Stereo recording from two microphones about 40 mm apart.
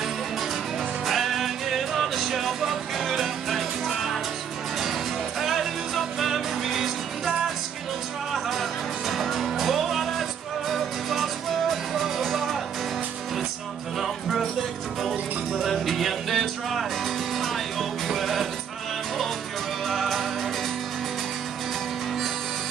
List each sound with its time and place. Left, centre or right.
1.0 s music: centre
5.4 s music: centre
13.9 s music: centre
15.5 s music: centre
19.9 s music: centre